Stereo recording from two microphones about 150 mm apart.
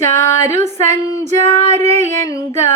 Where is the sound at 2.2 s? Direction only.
20° left (ahead or behind).